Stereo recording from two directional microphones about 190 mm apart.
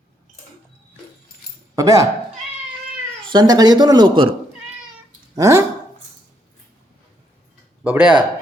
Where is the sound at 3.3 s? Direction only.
20° right (ahead or behind).